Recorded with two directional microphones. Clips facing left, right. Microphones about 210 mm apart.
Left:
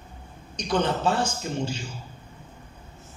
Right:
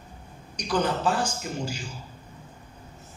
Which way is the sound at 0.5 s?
25° left (ahead or behind).